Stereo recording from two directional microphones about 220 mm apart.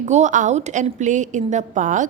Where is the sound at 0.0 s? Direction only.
35° right (ahead or behind).